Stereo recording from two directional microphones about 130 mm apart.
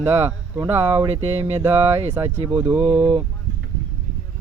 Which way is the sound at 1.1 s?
55° right (ahead or behind).